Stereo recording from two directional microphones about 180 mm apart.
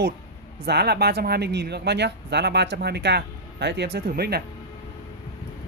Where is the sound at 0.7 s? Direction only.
65° right (ahead or behind).